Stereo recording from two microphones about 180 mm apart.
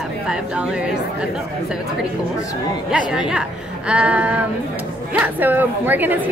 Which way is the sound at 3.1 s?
5° right (ahead or behind).